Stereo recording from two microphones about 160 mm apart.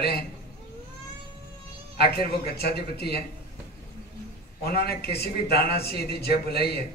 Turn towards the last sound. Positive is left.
turn(degrees=85)